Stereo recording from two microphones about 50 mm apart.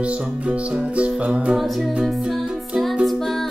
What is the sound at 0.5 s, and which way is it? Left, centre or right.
Music, right.